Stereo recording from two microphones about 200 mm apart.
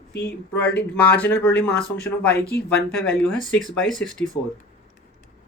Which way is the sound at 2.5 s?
55° left (ahead or behind).